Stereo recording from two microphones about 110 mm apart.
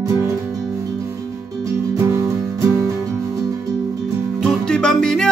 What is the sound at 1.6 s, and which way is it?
Music, 30° right (ahead or behind).